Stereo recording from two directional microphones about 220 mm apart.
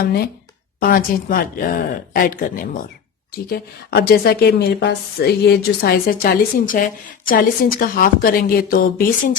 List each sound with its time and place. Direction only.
0.0 s speech: 45° left (ahead or behind)